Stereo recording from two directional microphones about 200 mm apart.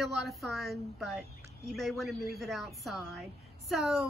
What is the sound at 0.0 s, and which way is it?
A woman's voice, centre (ahead or behind).